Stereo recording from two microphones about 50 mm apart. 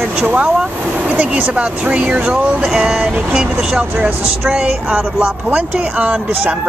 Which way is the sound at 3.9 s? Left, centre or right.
Right.